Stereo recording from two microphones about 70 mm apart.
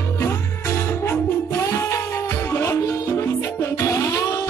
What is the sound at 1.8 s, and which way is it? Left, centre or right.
Music, left.